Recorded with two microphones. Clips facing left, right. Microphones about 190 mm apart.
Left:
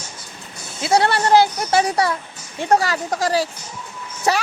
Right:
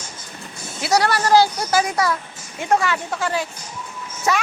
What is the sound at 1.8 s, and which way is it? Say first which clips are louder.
Speech: left 2 dB; 35° left (ahead or behind).